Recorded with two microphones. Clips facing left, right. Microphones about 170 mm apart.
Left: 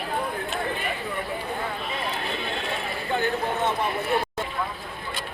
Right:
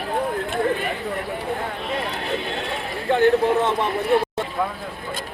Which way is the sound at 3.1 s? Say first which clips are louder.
Right 10 dB; 80° right.